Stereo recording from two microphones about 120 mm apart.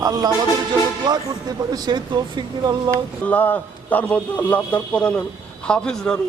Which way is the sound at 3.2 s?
15° left (ahead or behind).